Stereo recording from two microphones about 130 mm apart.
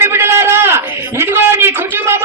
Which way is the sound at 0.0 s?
20° right (ahead or behind).